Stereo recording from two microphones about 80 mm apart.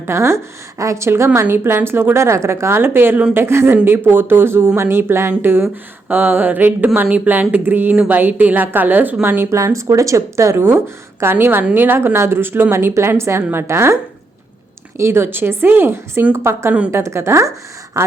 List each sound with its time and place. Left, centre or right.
0.0 s a woman's voice: right